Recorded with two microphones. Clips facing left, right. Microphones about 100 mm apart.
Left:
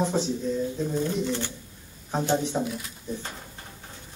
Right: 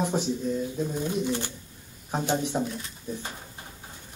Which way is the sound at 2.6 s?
5° left (ahead or behind).